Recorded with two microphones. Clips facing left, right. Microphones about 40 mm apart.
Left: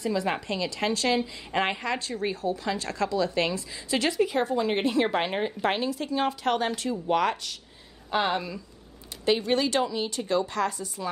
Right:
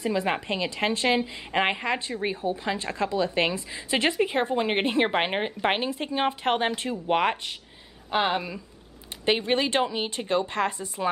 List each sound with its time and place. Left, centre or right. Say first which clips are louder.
0.0 s a woman's voice: right 1 dB; right
8.1 s a woman's voice: right 1 dB; centre
9.2 s a woman's voice: even; right